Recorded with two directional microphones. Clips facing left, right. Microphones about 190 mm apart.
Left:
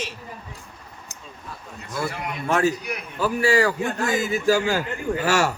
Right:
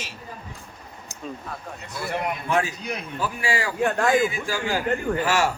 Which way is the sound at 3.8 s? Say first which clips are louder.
Right 3 dB; 65° right (ahead or behind).